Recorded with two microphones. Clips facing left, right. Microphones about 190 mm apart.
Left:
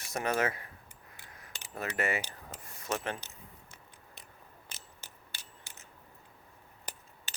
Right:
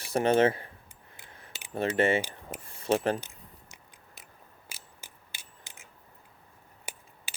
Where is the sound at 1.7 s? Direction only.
30° right (ahead or behind).